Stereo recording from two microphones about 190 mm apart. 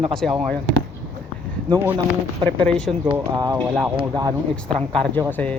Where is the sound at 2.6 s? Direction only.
5° left (ahead or behind).